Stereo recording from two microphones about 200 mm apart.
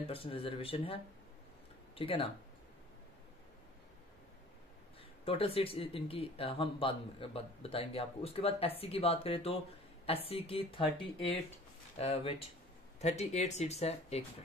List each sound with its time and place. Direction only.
0.1 s speech: 25° left (ahead or behind)
2.0 s speech: 25° left (ahead or behind)
5.2 s speech: 30° left (ahead or behind)